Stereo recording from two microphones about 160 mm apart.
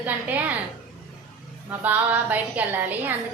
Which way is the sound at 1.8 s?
10° right (ahead or behind).